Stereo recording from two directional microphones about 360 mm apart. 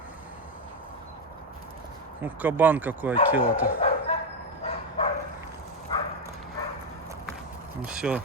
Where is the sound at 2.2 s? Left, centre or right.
Centre.